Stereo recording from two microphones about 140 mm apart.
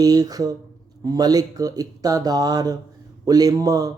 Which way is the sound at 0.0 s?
25° right (ahead or behind).